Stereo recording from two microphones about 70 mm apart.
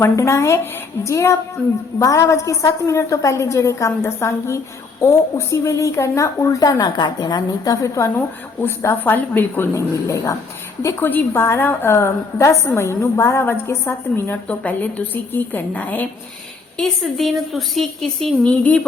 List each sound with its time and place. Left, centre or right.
0.0 s a woman's voice: left
9.0 s a woman's voice: left
9.7 s a woman's voice: left
11.0 s a woman's voice: left
14.4 s a woman's voice: left
16.7 s a woman's voice: centre
18.4 s a woman's voice: centre